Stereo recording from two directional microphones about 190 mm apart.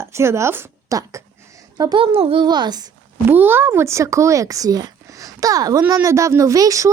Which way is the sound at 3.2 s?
10° right (ahead or behind).